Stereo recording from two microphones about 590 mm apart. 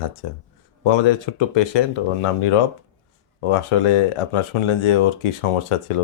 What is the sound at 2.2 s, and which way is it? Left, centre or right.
Speech, left.